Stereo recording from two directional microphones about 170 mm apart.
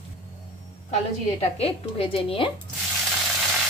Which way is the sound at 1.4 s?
35° left (ahead or behind).